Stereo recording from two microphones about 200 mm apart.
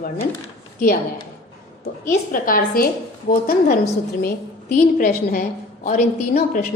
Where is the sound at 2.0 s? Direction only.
45° left (ahead or behind).